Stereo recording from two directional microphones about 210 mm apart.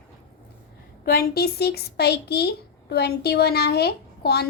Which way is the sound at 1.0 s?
45° left (ahead or behind).